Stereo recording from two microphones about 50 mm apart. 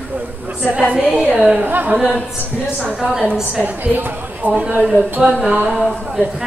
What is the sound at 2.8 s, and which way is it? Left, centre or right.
Speech, centre.